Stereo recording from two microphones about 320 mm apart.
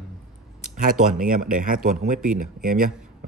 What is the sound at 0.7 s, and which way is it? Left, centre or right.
Speech, right.